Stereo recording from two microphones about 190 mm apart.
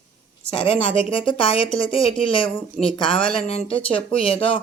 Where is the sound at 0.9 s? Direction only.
30° left (ahead or behind).